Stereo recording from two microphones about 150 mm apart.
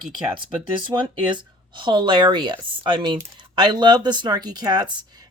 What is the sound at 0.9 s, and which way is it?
Speech, 30° right (ahead or behind).